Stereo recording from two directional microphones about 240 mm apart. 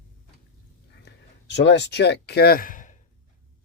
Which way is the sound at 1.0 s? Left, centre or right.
Left.